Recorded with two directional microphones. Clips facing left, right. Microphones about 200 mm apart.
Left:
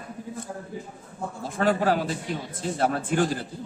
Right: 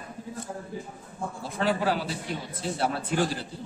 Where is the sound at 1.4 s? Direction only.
50° left (ahead or behind).